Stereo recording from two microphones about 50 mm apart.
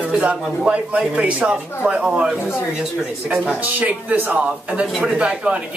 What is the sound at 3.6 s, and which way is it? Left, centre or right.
Speech, right.